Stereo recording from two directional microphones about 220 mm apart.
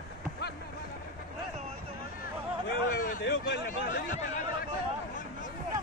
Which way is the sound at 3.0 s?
45° left (ahead or behind).